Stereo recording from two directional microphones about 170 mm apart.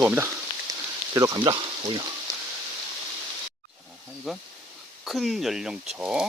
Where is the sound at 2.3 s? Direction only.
20° right (ahead or behind).